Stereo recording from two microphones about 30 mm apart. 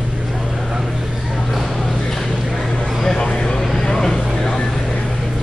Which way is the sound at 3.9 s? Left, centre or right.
Centre.